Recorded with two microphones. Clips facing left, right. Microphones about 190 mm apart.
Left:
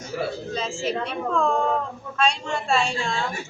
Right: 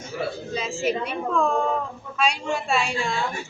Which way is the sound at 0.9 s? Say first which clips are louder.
Right 2 dB; 10° right (ahead or behind).